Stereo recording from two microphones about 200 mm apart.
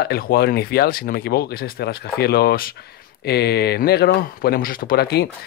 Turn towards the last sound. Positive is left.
turn(degrees=50)  # may be behind; listen again after turning